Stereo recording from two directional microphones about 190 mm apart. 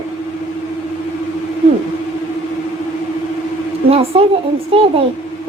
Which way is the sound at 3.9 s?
30° right (ahead or behind).